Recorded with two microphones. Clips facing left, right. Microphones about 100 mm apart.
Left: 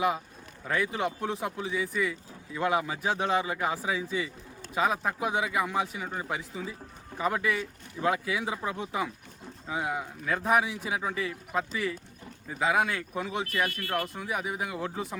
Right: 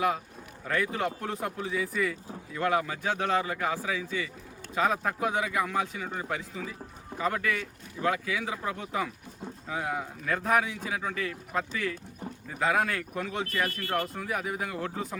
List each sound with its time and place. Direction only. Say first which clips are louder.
0.6 s speech: even; 5° left (ahead or behind)
2.6 s a man's voice: even; 15° left (ahead or behind)
4.7 s a man's voice: even; 10° left (ahead or behind)
13.5 s speech: left 1 dB; 35° right (ahead or behind)
14.1 s speech: even; 5° left (ahead or behind)